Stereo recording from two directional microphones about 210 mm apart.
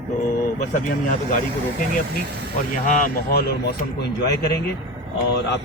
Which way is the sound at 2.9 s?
40° left (ahead or behind).